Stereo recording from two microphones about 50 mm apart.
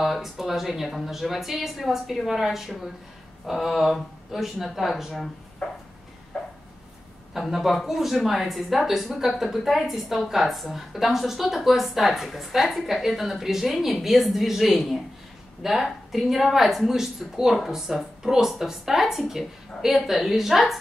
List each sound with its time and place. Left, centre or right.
0.0 s speech: centre
5.6 s a sound: left
7.3 s speech: centre